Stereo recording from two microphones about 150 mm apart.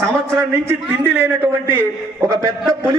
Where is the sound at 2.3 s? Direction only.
25° right (ahead or behind).